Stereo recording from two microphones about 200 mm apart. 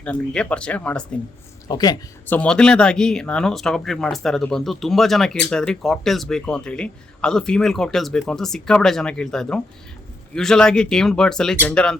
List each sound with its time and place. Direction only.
0.0 s speech: 5° left (ahead or behind)
1.6 s speech: 20° left (ahead or behind)
2.2 s speech: 10° left (ahead or behind)